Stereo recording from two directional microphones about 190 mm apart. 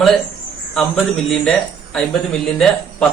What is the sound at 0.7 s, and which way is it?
Speech, 5° left (ahead or behind).